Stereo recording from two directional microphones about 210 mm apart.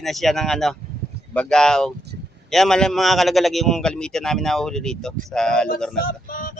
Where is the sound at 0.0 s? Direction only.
Centre (ahead or behind).